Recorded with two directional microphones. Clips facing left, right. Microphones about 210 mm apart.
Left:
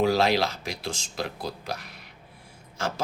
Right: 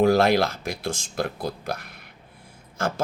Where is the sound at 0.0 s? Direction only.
55° right (ahead or behind).